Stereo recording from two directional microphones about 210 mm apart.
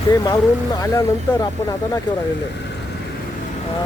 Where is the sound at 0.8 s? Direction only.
15° left (ahead or behind).